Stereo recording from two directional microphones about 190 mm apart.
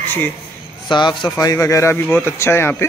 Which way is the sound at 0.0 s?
10° left (ahead or behind).